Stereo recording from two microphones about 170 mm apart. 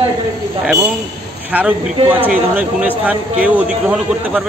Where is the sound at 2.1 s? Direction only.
10° right (ahead or behind).